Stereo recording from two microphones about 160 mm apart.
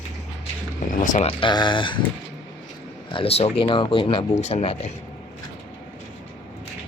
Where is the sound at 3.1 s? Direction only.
35° left (ahead or behind).